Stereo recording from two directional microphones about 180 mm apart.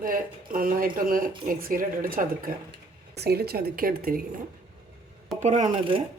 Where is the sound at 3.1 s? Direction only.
65° right (ahead or behind).